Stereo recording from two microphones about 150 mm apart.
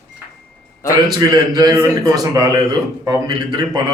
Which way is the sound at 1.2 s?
25° right (ahead or behind).